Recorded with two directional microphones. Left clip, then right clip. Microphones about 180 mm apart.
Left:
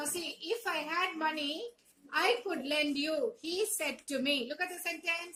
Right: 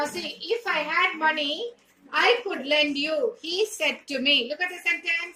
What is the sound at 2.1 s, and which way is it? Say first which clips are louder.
A woman's voice: right 9 dB; 25° left (ahead or behind).